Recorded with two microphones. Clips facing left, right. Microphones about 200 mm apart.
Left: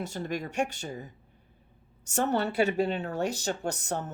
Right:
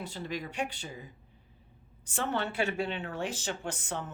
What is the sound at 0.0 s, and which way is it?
Speech, 45° left (ahead or behind).